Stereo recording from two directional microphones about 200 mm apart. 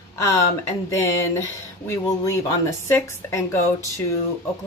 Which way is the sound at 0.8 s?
15° left (ahead or behind).